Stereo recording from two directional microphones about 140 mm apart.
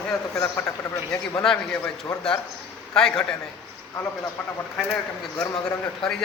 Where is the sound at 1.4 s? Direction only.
5° left (ahead or behind).